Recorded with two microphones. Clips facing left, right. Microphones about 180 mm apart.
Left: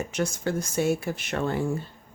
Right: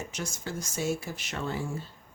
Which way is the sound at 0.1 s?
60° left (ahead or behind).